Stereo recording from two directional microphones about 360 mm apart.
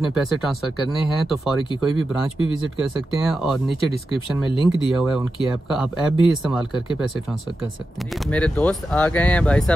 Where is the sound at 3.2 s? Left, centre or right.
Centre.